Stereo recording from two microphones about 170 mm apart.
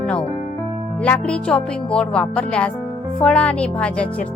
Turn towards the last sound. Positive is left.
turn(degrees=5)  # may be behind; listen again after turning